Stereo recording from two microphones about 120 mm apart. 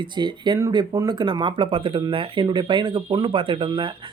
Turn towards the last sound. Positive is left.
turn(degrees=-45)  # may be behind; listen again after turning